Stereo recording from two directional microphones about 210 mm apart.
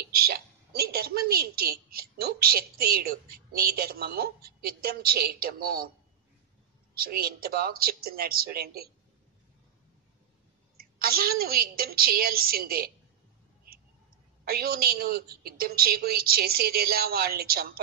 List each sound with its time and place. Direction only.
0.1 s a woman's voice: 45° right (ahead or behind)
7.0 s a woman's voice: 45° right (ahead or behind)
10.8 s a woman's voice: 45° right (ahead or behind)
14.4 s a woman's voice: 45° right (ahead or behind)